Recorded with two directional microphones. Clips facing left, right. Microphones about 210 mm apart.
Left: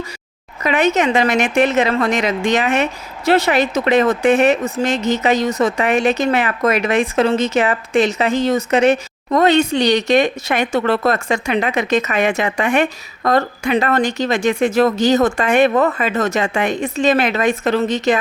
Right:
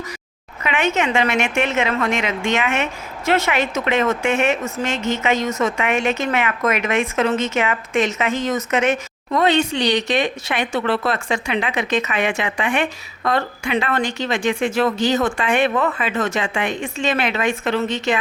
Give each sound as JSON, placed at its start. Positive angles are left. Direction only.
{"t": 0.6, "sound": "a woman's voice", "side_deg": 40}